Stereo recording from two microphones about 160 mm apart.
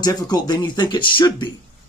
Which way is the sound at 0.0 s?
25° left (ahead or behind).